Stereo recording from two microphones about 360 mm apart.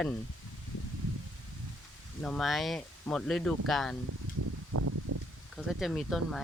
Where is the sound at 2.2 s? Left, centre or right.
Centre.